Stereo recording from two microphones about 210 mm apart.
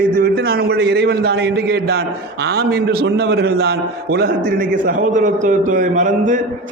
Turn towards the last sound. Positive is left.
turn(degrees=-40)  # may be behind; listen again after turning